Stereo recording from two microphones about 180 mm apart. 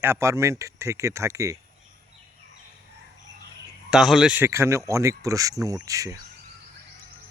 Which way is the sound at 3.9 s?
Centre (ahead or behind).